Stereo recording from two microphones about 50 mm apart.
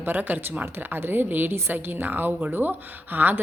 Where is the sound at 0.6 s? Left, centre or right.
Right.